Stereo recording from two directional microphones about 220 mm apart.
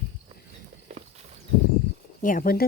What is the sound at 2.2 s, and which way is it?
Speech, 40° left (ahead or behind).